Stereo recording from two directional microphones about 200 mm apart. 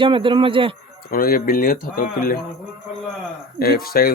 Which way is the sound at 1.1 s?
45° left (ahead or behind).